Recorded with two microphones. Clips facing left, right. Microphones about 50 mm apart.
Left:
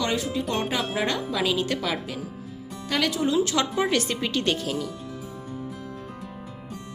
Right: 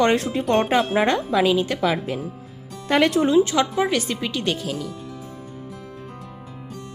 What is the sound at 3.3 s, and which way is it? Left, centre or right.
Speech, right.